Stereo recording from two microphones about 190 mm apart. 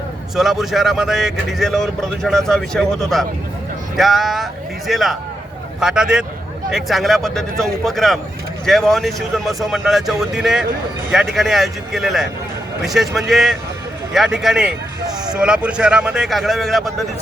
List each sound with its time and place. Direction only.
0.3 s speech: centre (ahead or behind)